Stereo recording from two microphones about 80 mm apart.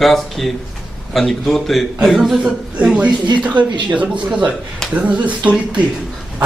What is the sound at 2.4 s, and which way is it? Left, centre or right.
Speech, centre.